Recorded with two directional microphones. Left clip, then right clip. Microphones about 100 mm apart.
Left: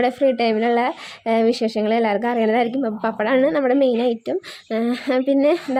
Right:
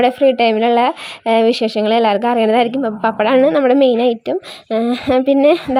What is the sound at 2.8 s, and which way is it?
Speech, 15° right (ahead or behind).